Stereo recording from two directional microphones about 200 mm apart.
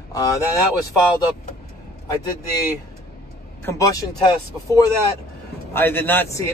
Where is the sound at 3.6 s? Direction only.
15° left (ahead or behind).